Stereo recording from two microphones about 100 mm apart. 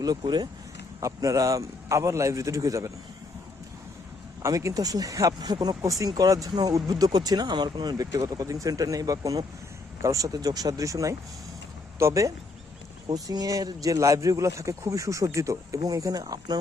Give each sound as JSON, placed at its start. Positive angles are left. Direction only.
{"t": 0.0, "sound": "speech", "side_deg": -40}
{"t": 4.4, "sound": "speech", "side_deg": -35}